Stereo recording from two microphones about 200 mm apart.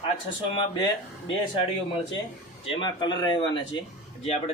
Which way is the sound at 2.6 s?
25° left (ahead or behind).